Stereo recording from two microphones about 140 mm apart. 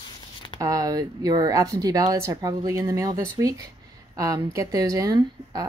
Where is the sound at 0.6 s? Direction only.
25° right (ahead or behind).